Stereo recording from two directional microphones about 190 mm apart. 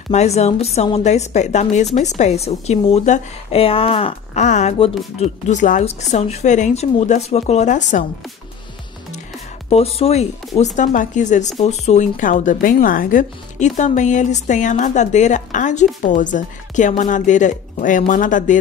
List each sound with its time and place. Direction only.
0.1 s speech: 35° left (ahead or behind)
9.7 s speech: 30° left (ahead or behind)